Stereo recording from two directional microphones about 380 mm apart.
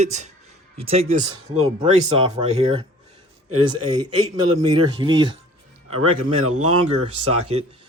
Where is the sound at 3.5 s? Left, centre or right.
Right.